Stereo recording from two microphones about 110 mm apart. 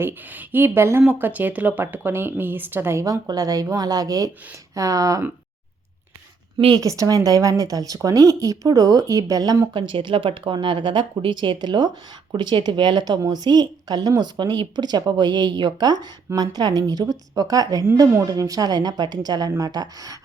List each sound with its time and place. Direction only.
0.0 s a woman's voice: 20° right (ahead or behind)
6.7 s a woman's voice: 30° right (ahead or behind)
9.7 s a woman's voice: 50° right (ahead or behind)